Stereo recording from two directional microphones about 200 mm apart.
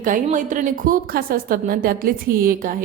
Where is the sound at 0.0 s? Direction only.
40° right (ahead or behind).